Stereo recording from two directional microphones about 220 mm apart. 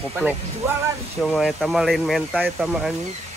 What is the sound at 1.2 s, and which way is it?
Speech, centre (ahead or behind).